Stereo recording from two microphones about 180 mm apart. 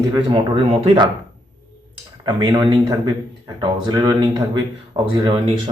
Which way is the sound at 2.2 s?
25° right (ahead or behind).